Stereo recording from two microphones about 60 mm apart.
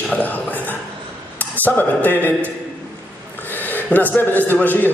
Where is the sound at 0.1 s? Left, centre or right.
Left.